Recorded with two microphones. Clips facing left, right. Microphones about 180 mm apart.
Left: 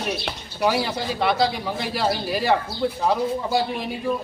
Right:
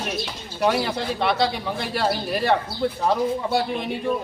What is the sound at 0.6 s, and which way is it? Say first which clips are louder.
A man's voice: right 1 dB; centre (ahead or behind).